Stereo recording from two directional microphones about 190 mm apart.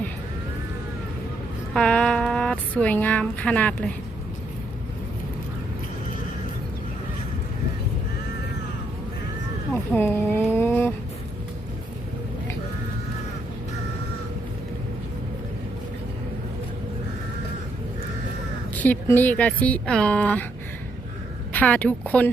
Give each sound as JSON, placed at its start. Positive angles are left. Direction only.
{"t": 1.7, "sound": "speech", "side_deg": 5}
{"t": 9.9, "sound": "a sound", "side_deg": 10}
{"t": 18.7, "sound": "speech", "side_deg": 10}
{"t": 21.5, "sound": "speech", "side_deg": 10}